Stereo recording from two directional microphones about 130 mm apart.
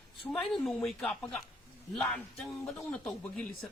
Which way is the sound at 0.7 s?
Centre (ahead or behind).